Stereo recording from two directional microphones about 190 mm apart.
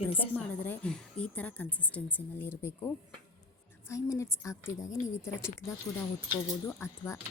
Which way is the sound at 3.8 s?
15° left (ahead or behind).